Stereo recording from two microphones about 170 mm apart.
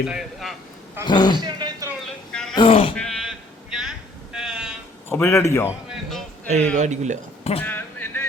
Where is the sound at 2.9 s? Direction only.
5° left (ahead or behind).